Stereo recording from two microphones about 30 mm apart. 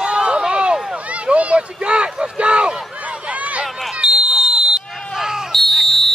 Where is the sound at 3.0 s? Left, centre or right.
Right.